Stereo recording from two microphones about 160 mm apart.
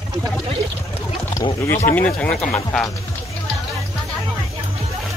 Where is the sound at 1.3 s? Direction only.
20° left (ahead or behind).